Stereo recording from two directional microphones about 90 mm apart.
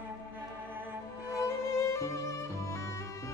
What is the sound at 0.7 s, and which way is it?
Music, 25° right (ahead or behind).